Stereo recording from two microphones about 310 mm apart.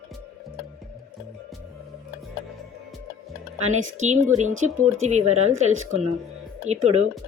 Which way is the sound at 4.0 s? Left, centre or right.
Right.